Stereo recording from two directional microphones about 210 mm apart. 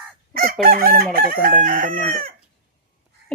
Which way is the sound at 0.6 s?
45° right (ahead or behind).